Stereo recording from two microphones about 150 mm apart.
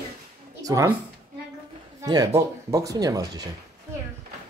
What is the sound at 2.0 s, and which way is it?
Speech, 25° right (ahead or behind).